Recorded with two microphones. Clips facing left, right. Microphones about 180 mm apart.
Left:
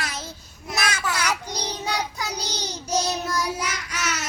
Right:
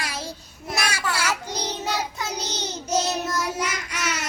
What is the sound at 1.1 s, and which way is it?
Child singing, 5° right (ahead or behind).